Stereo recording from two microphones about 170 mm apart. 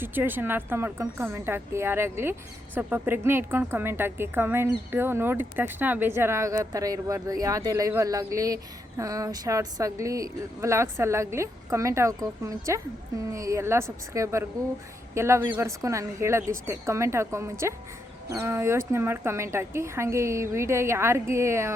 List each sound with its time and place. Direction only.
0.0 s a woman's voice: 10° right (ahead or behind)